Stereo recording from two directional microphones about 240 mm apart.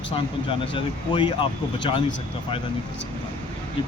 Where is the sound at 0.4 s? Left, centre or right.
Centre.